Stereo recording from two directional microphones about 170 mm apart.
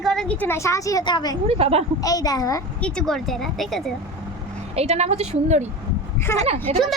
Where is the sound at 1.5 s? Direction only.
35° right (ahead or behind).